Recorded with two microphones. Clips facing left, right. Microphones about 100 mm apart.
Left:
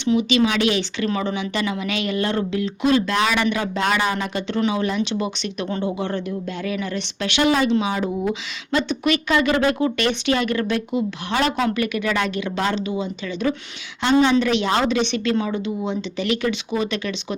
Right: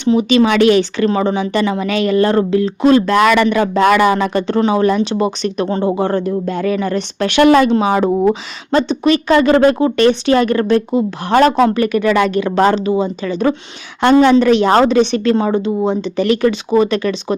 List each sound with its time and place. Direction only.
0.0 s speech: 40° right (ahead or behind)
0.4 s speech: 55° right (ahead or behind)
4.4 s speech: 40° right (ahead or behind)
14.0 s speech: 50° right (ahead or behind)